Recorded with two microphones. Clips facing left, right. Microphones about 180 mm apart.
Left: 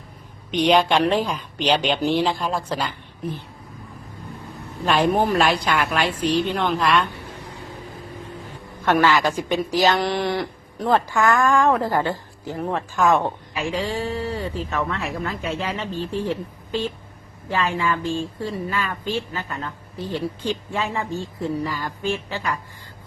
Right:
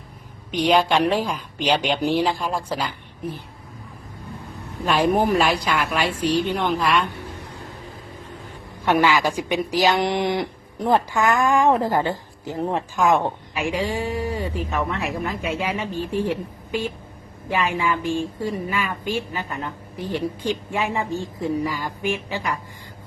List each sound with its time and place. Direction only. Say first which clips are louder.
0.6 s a woman's voice: left 1 dB; 5° right (ahead or behind)
4.9 s a woman's voice: even; 5° right (ahead or behind)
8.8 s a woman's voice: even; 15° right (ahead or behind)